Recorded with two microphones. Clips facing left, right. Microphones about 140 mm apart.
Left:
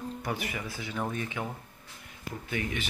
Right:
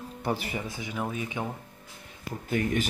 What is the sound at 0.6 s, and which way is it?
Speech, 20° right (ahead or behind).